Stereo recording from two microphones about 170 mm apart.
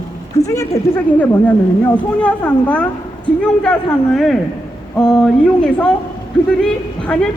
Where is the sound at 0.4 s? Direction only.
20° left (ahead or behind).